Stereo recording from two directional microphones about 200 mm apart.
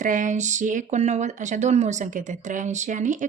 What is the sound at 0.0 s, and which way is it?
Speech, 40° right (ahead or behind).